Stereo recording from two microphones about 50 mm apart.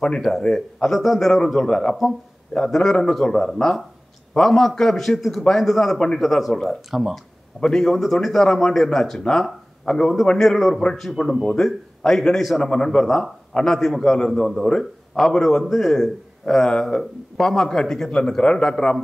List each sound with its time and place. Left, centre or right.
0.4 s a man's voice: centre
6.9 s speech: centre
7.6 s a man's voice: centre
15.6 s a man's voice: centre